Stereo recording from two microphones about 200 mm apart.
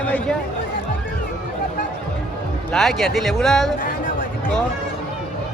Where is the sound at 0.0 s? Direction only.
5° left (ahead or behind).